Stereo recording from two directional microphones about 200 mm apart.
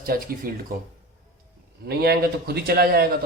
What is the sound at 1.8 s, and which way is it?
A man's voice, 50° right (ahead or behind).